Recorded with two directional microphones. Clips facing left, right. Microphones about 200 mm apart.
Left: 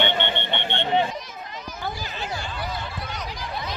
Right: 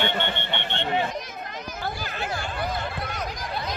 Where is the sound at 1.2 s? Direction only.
50° right (ahead or behind).